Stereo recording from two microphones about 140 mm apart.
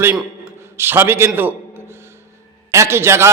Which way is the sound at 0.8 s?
15° right (ahead or behind).